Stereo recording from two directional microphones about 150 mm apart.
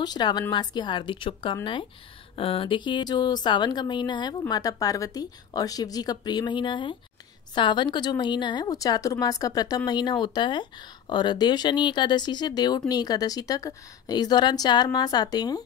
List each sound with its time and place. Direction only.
0.0 s speech: 30° left (ahead or behind)